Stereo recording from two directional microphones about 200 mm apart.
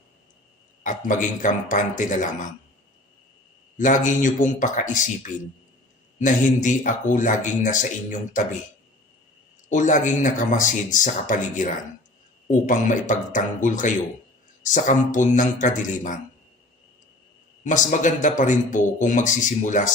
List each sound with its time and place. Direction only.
0.9 s speech: 40° left (ahead or behind)
3.8 s speech: 40° left (ahead or behind)
6.1 s speech: 40° left (ahead or behind)
9.6 s speech: 40° left (ahead or behind)
17.6 s speech: 40° left (ahead or behind)